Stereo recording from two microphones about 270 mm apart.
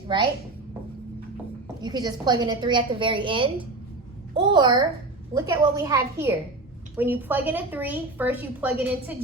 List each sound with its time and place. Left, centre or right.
1.8 s a woman's voice: centre